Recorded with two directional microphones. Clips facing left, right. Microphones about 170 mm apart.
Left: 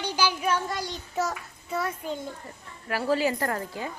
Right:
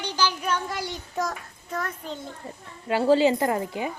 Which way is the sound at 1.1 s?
10° left (ahead or behind).